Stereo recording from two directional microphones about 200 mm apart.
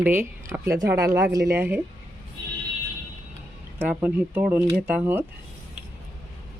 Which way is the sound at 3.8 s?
5° right (ahead or behind).